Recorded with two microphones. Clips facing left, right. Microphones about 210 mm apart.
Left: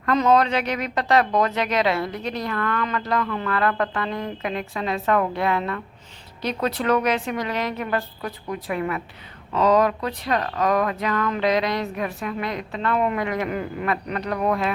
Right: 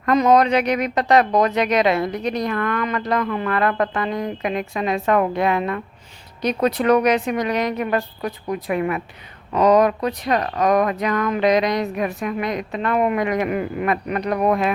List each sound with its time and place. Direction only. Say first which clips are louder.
0.0 s speech: right 3 dB; 15° right (ahead or behind)